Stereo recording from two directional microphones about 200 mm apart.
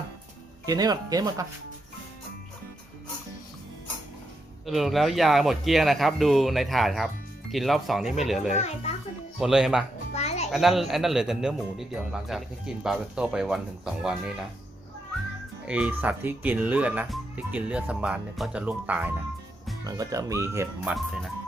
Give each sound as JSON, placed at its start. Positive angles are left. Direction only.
{"t": 0.6, "sound": "speech", "side_deg": -20}
{"t": 4.6, "sound": "speech", "side_deg": 0}
{"t": 8.5, "sound": "a child's voice", "side_deg": 30}
{"t": 9.4, "sound": "speech", "side_deg": -5}
{"t": 10.2, "sound": "music", "side_deg": 35}
{"t": 10.5, "sound": "speech", "side_deg": 0}
{"t": 15.6, "sound": "speech", "side_deg": -5}